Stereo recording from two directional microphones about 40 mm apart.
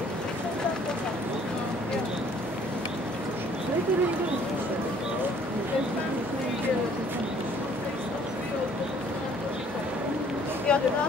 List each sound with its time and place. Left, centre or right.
10.7 s speech: left